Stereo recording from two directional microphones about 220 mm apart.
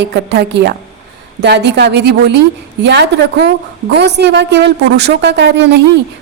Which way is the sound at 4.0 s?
50° right (ahead or behind).